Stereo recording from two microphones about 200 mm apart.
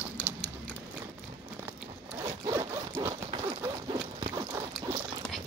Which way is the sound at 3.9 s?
20° right (ahead or behind).